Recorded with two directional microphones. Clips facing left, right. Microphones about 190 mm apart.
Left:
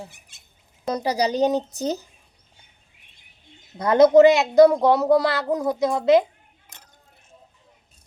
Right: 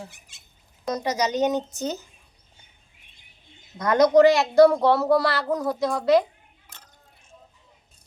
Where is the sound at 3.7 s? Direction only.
30° left (ahead or behind).